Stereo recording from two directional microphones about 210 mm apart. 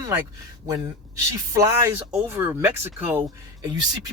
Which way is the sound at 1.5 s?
15° right (ahead or behind).